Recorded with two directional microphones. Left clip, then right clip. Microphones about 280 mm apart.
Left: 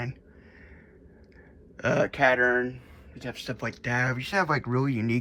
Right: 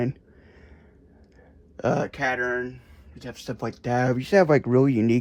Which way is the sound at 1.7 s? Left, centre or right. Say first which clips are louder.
Left 1 dB; centre.